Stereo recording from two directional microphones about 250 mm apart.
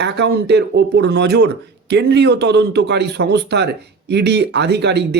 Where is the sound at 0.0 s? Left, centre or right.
Right.